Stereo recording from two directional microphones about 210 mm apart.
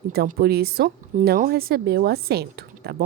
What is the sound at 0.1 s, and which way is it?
Speech, 45° right (ahead or behind).